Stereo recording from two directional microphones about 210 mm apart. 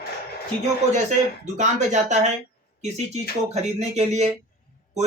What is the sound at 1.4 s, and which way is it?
Speech, 35° right (ahead or behind).